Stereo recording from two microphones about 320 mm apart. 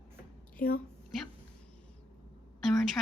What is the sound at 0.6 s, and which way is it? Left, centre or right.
Speech, left.